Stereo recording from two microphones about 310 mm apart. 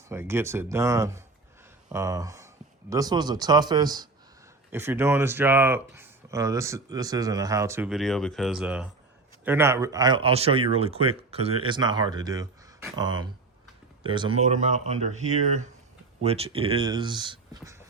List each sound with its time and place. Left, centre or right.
0.1 s speech: centre